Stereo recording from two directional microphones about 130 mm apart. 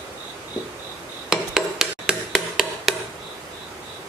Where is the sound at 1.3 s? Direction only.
5° right (ahead or behind).